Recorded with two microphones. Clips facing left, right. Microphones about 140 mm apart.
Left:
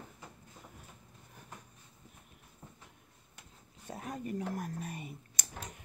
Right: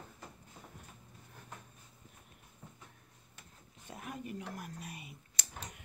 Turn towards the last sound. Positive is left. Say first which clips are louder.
# left 6 dB
turn(degrees=45)  # may be behind; listen again after turning